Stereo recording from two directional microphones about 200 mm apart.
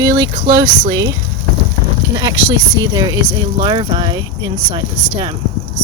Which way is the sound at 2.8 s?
20° right (ahead or behind).